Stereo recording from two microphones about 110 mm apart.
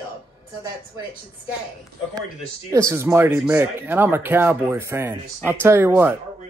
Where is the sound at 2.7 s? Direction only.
25° right (ahead or behind).